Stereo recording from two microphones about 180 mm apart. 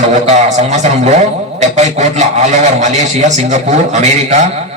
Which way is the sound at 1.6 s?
40° right (ahead or behind).